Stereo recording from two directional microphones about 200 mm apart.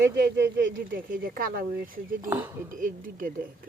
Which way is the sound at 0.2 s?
60° right (ahead or behind).